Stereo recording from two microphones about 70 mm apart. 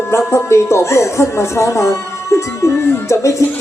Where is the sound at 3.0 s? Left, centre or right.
Left.